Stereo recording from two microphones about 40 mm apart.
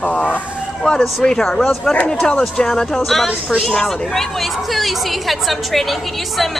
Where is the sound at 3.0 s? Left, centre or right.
Centre.